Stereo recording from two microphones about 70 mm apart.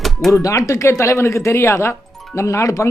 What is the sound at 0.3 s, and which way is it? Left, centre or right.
Speech, left.